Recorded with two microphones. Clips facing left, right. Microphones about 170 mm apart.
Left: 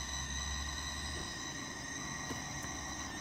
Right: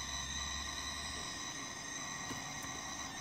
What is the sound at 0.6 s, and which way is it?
Vehicle, 55° left (ahead or behind).